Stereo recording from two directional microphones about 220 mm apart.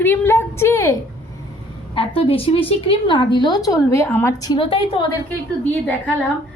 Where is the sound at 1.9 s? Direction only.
25° left (ahead or behind).